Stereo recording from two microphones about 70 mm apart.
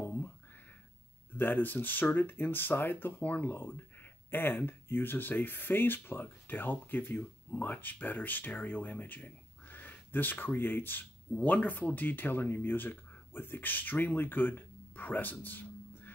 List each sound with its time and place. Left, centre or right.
1.4 s speech: left